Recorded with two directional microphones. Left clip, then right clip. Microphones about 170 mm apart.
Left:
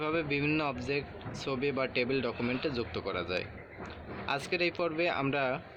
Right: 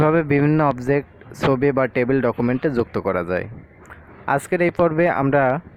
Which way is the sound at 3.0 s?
30° right (ahead or behind).